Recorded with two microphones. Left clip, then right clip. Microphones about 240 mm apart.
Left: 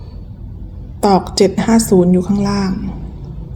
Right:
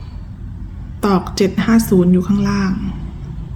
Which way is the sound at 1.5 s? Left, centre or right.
Centre.